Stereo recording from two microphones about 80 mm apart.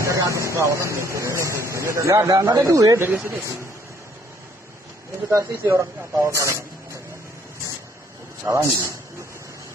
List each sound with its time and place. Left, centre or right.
0.0 s speech: right
3.3 s speech: right
5.3 s a man's voice: right
8.5 s a man's voice: right